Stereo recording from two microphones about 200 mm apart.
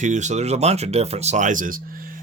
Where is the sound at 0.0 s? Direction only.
35° right (ahead or behind).